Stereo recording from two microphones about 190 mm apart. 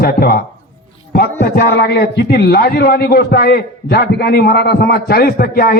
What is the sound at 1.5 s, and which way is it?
A man's voice, 60° left (ahead or behind).